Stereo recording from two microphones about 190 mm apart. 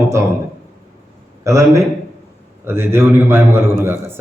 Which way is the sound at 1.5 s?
15° right (ahead or behind).